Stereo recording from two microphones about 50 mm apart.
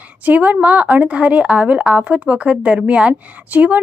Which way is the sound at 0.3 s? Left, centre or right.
Right.